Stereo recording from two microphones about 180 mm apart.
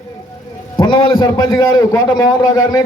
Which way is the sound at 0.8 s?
25° left (ahead or behind).